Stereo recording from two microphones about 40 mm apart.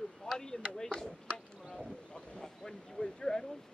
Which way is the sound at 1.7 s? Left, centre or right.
Centre.